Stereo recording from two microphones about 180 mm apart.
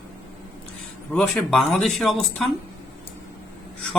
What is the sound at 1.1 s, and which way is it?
Speech, 5° left (ahead or behind).